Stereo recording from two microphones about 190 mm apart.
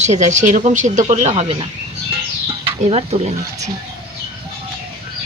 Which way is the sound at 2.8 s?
35° right (ahead or behind).